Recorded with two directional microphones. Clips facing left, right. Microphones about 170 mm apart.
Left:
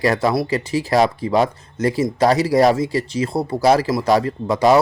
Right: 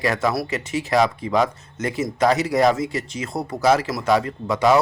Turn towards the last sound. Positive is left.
turn(degrees=35)  # may be behind; listen again after turning